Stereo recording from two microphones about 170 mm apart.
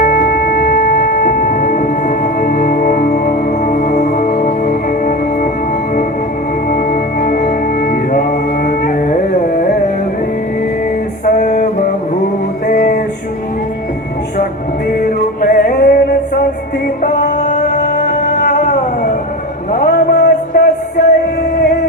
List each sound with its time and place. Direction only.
0.0 s music: 60° left (ahead or behind)
6.7 s music: 55° left (ahead or behind)
11.3 s music: 50° left (ahead or behind)
12.6 s music: 60° left (ahead or behind)
14.8 s music: 60° left (ahead or behind)
17.9 s music: 40° left (ahead or behind)
19.7 s a sound: 60° left (ahead or behind)